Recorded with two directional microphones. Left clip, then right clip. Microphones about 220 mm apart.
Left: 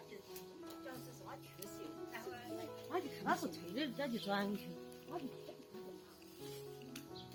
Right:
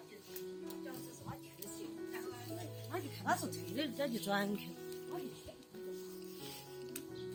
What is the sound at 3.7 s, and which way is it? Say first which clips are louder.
Speech: right 3 dB; 55° right (ahead or behind).